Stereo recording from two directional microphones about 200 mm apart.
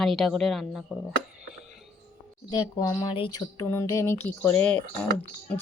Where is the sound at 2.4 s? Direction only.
20° left (ahead or behind).